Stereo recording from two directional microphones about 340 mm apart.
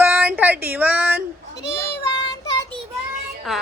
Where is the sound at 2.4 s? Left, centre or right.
Centre.